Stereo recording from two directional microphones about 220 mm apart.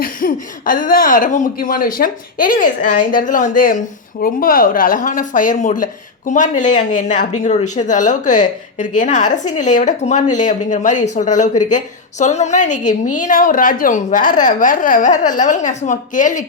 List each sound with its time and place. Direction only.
0.0 s speech: 40° left (ahead or behind)